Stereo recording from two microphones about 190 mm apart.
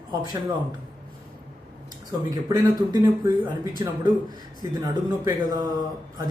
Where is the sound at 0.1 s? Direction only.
20° right (ahead or behind).